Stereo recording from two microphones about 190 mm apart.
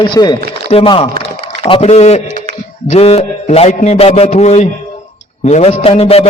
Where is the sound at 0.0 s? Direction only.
25° left (ahead or behind).